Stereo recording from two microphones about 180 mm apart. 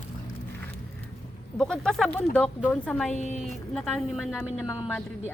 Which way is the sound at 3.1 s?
40° left (ahead or behind).